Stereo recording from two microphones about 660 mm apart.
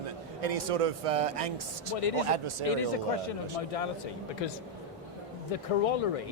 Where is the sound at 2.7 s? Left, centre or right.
Left.